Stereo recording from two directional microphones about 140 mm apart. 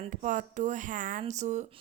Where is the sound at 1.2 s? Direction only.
55° right (ahead or behind).